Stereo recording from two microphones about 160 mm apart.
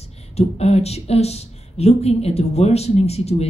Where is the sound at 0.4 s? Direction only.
40° left (ahead or behind).